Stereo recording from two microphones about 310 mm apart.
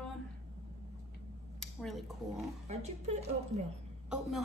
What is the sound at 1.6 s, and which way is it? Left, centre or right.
Speech, centre.